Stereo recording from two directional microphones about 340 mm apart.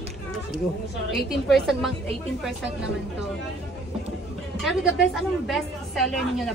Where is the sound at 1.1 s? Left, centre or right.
Centre.